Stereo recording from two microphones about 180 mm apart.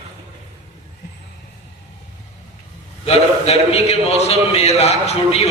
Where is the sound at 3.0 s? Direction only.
35° left (ahead or behind).